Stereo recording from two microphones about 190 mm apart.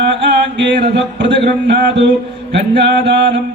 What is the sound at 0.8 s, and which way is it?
Chant, 65° right (ahead or behind).